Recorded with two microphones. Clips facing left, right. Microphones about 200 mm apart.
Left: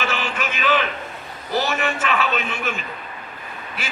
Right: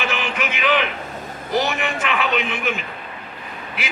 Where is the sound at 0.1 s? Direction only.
15° right (ahead or behind).